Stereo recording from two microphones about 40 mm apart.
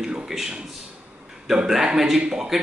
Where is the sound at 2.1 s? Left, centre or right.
Centre.